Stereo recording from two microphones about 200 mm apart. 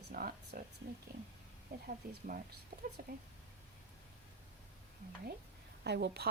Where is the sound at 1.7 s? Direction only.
45° right (ahead or behind).